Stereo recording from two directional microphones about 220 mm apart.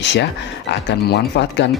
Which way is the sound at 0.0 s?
55° left (ahead or behind).